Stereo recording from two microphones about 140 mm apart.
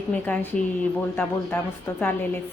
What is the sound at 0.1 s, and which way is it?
A woman's voice, 10° left (ahead or behind).